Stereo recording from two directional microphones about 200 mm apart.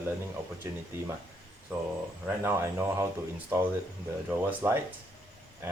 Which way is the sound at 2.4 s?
15° right (ahead or behind).